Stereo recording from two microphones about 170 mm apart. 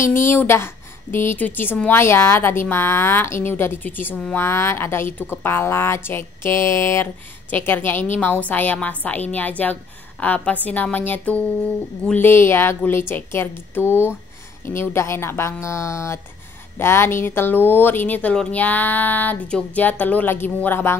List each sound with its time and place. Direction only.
0.0 s a woman's voice: 15° left (ahead or behind)